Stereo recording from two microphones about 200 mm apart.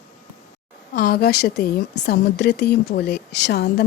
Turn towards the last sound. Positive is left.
turn(degrees=55)  # may be behind; listen again after turning